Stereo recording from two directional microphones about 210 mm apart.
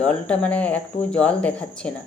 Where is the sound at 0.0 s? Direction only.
5° left (ahead or behind).